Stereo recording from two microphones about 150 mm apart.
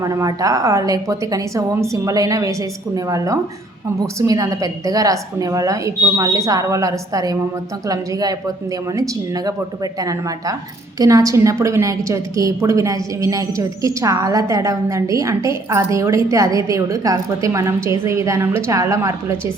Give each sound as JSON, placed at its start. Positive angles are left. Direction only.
{"t": 0.0, "sound": "a woman's voice", "side_deg": -25}